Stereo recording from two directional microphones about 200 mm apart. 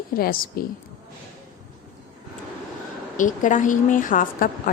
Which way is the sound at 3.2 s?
40° left (ahead or behind).